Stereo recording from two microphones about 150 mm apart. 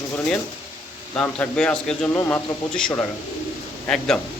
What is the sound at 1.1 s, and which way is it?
A man's voice, 10° left (ahead or behind).